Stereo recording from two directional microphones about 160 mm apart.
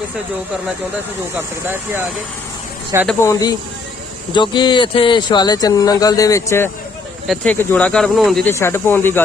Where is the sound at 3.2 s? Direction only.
20° left (ahead or behind); by 8.5 s centre (ahead or behind).